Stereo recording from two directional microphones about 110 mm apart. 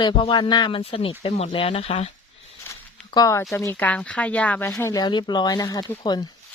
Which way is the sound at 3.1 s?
35° left (ahead or behind).